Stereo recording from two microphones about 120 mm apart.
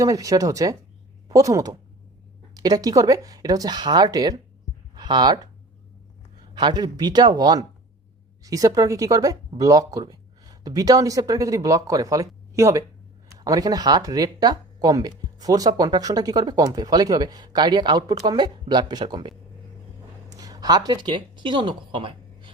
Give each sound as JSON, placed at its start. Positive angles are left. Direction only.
{"t": 0.0, "sound": "speech", "side_deg": -30}
{"t": 6.5, "sound": "speech", "side_deg": -40}
{"t": 20.3, "sound": "speech", "side_deg": -30}